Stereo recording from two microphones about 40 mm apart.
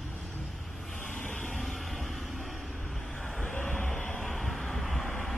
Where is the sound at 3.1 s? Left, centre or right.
Left.